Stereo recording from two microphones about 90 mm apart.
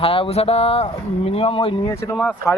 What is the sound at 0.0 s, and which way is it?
Speech, 90° left.